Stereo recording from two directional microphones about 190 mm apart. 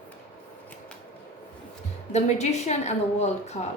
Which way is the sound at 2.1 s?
35° left (ahead or behind).